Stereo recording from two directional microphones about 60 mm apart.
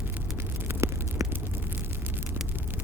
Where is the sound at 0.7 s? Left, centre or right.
Right.